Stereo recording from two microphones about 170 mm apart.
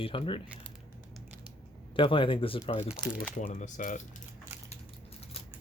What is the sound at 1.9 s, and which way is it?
Speech, 30° left (ahead or behind).